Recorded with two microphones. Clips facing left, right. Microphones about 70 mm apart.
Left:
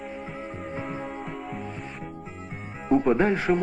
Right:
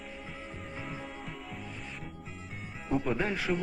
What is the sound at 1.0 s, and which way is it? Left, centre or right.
Music, left.